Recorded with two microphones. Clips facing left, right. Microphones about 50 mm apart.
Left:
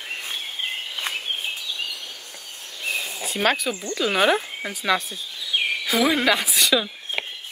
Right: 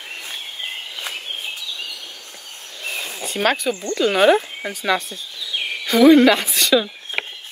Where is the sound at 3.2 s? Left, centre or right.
Centre.